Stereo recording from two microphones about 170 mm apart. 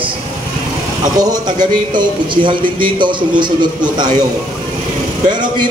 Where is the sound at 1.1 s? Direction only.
25° right (ahead or behind).